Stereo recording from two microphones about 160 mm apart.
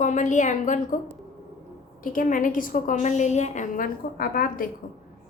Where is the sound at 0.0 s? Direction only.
50° left (ahead or behind).